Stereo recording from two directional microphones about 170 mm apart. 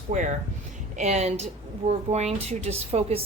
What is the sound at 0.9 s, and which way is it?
A woman's voice, 40° right (ahead or behind).